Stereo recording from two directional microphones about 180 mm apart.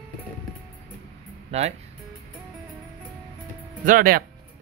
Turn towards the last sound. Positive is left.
turn(degrees=-50)  # may be behind; listen again after turning